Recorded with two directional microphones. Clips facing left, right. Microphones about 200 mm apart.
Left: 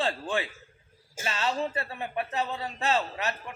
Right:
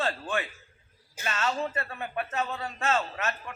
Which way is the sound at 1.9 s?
20° left (ahead or behind).